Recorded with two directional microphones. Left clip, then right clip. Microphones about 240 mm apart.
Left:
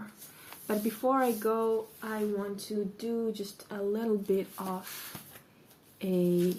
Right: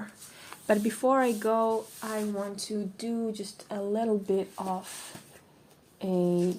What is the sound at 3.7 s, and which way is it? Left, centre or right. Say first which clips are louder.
Speech: right 3 dB; right.